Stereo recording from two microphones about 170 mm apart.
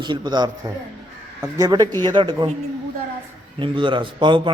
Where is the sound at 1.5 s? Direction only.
25° right (ahead or behind).